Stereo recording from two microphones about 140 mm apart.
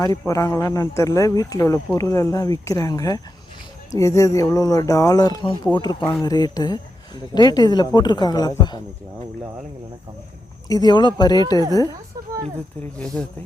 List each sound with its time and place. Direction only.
0.0 s speech: 25° left (ahead or behind)
10.7 s speech: 30° left (ahead or behind)